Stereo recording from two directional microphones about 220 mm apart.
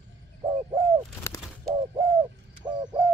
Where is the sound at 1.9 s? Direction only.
20° right (ahead or behind).